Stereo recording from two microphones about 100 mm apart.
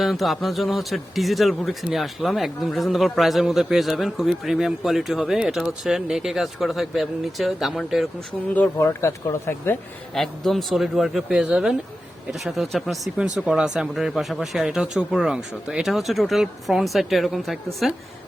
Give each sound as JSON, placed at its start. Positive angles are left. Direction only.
{"t": 0.0, "sound": "a man's voice", "side_deg": 0}
{"t": 8.8, "sound": "speech", "side_deg": 30}
{"t": 10.2, "sound": "a man's voice", "side_deg": 0}